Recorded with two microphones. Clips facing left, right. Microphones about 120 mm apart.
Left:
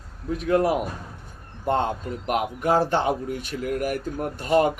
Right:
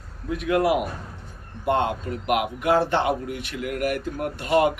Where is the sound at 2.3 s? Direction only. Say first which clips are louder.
Right 1 dB; 40° left (ahead or behind).